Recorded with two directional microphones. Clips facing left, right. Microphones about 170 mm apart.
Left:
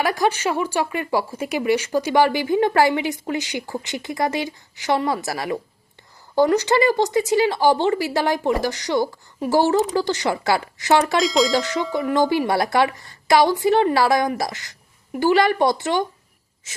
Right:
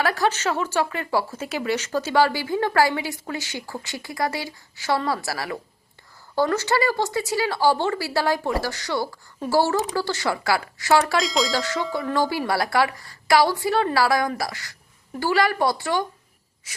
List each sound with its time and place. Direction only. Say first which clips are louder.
0.0 s speech: left 2 dB; 15° left (ahead or behind)
11.2 s speech: left 5 dB; centre (ahead or behind)
11.5 s speech: left 4 dB; 20° left (ahead or behind)